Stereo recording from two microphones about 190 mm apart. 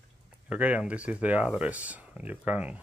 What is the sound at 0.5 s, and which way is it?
Speech, 5° right (ahead or behind).